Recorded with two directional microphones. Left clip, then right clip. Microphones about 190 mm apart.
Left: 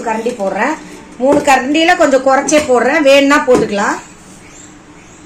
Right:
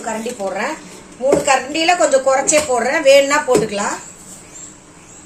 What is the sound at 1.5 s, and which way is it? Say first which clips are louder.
A woman's voice: left 5 dB; 40° left (ahead or behind).